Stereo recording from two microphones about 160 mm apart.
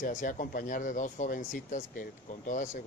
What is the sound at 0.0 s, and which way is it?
Speech, 55° left (ahead or behind).